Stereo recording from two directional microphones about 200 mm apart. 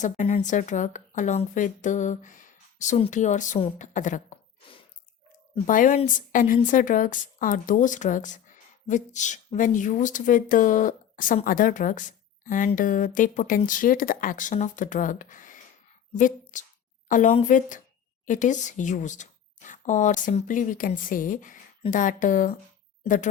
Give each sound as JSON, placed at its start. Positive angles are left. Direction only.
{"t": 0.0, "sound": "speech", "side_deg": 35}
{"t": 5.5, "sound": "speech", "side_deg": 40}